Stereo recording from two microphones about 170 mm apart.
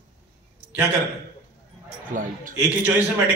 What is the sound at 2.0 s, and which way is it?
Speech, 50° right (ahead or behind).